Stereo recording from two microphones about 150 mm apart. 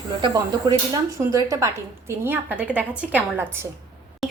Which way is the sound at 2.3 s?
10° right (ahead or behind).